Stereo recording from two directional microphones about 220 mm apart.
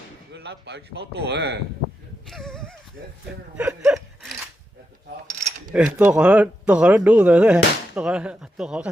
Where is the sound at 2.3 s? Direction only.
Centre (ahead or behind).